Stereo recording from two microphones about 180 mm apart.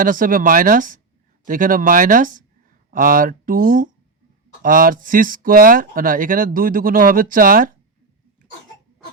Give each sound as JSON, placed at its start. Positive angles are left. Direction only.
{"t": 0.0, "sound": "speech", "side_deg": -50}